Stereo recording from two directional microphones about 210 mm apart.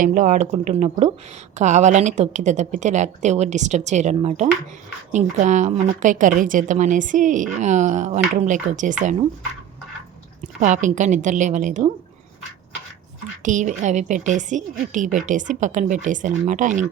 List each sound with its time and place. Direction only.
0.0 s a woman's voice: 40° right (ahead or behind)
10.6 s a woman's voice: 35° right (ahead or behind)
13.4 s a woman's voice: 35° right (ahead or behind)